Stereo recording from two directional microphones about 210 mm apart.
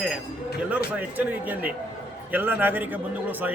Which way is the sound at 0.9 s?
10° right (ahead or behind).